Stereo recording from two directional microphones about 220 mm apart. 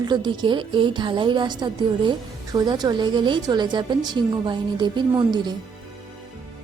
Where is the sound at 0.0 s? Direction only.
20° right (ahead or behind).